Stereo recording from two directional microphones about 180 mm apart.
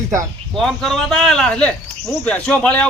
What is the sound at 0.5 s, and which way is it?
Speech, centre (ahead or behind).